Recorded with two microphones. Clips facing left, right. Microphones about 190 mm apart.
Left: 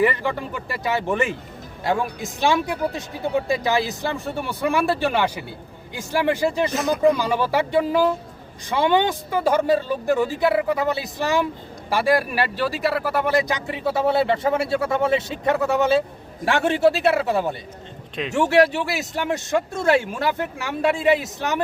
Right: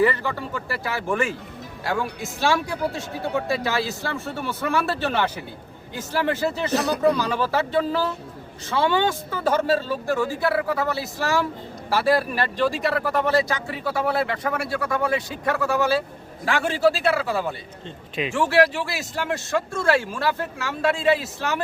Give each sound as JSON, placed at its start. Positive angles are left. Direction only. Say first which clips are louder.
{"t": 0.0, "sound": "speech", "louder": "left 1 dB", "side_deg": 15}